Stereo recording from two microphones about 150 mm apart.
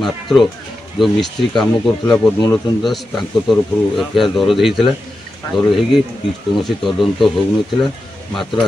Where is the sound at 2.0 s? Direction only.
25° left (ahead or behind).